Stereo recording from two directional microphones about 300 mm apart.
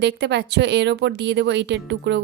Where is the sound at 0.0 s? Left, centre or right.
Right.